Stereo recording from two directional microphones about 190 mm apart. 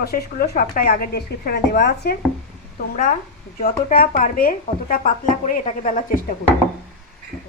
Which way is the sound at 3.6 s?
50° left (ahead or behind).